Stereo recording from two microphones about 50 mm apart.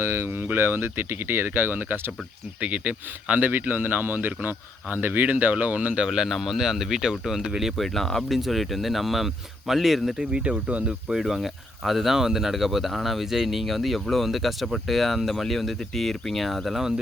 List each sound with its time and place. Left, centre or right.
0.0 s speech: right
6.1 s speech: centre
7.8 s speech: centre
10.2 s speech: right
11.1 s speech: centre